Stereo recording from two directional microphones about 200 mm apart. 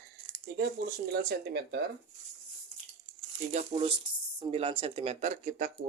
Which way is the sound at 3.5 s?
30° right (ahead or behind).